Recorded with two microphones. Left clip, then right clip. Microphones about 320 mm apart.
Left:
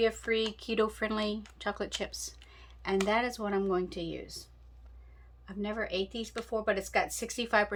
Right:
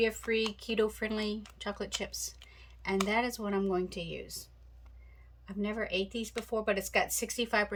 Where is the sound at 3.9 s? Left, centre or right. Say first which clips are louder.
Left 1 dB; right.